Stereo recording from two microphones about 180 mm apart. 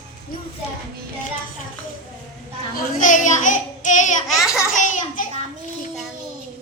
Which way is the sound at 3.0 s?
45° left (ahead or behind).